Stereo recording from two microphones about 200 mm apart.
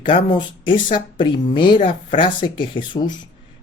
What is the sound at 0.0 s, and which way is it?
Speech, 25° left (ahead or behind).